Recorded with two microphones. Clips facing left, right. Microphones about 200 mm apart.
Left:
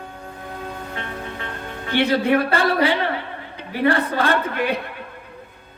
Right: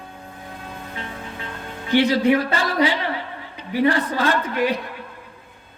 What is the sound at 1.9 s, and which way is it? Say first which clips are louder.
Speech: right 1 dB; 60° left (ahead or behind).